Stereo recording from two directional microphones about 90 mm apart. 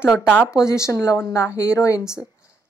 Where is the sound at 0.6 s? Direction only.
35° left (ahead or behind).